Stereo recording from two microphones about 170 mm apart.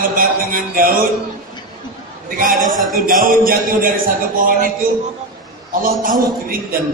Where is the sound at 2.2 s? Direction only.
55° right (ahead or behind).